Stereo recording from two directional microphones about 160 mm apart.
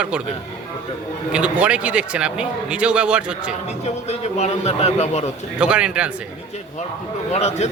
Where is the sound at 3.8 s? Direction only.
45° left (ahead or behind).